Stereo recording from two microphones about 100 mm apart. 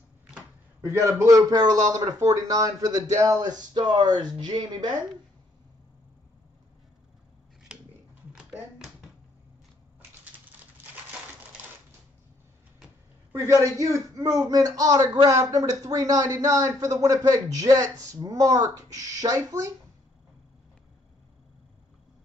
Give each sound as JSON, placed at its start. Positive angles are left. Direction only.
{"t": 0.7, "sound": "a man's voice", "side_deg": -30}
{"t": 3.4, "sound": "speech", "side_deg": -45}
{"t": 8.3, "sound": "tap", "side_deg": -10}
{"t": 13.3, "sound": "a man's voice", "side_deg": -30}